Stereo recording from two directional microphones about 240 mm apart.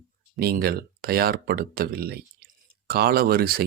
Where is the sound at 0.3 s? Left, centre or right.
Right.